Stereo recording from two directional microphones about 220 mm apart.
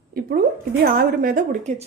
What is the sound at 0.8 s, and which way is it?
Speech, 45° right (ahead or behind).